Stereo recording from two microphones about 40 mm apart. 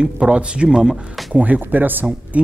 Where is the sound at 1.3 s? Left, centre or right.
Right.